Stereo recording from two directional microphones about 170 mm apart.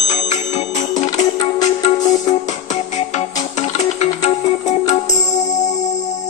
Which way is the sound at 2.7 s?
40° left (ahead or behind).